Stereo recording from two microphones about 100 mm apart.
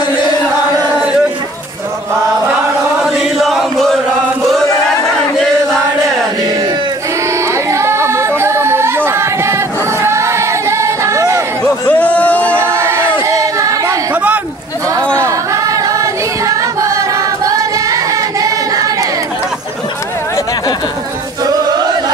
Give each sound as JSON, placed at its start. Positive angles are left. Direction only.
{"t": 3.0, "sound": "chant", "side_deg": 0}
{"t": 7.5, "sound": "singing", "side_deg": -25}
{"t": 11.9, "sound": "a sound", "side_deg": 15}
{"t": 12.5, "sound": "a sound", "side_deg": -25}
{"t": 13.2, "sound": "singing", "side_deg": -35}
{"t": 15.1, "sound": "music", "side_deg": -30}